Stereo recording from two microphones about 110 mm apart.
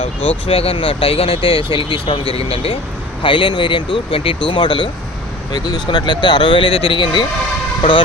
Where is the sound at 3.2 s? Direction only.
50° left (ahead or behind).